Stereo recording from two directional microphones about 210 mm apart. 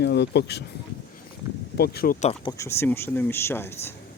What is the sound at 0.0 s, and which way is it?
Speech, 55° left (ahead or behind).